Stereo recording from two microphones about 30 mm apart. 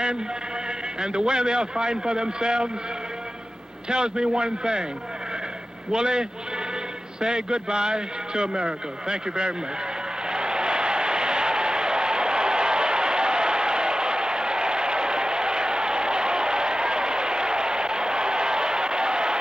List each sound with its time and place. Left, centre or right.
1.0 s a man's voice: right
3.9 s a man's voice: right
5.9 s a man's voice: right
10.3 s a sound: right